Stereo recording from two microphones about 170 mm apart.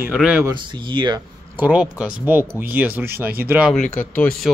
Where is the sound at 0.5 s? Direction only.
25° right (ahead or behind).